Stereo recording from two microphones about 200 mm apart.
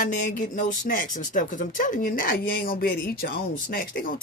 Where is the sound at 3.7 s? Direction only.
40° left (ahead or behind).